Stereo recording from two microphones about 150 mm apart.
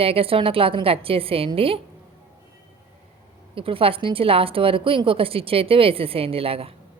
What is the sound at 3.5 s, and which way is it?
A woman's voice, 40° right (ahead or behind).